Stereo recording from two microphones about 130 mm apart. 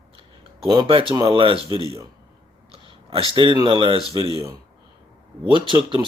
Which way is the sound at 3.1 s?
40° right (ahead or behind).